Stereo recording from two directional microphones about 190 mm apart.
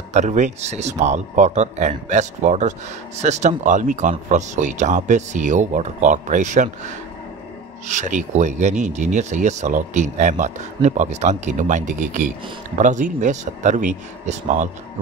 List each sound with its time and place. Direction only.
0.1 s speech: 40° right (ahead or behind)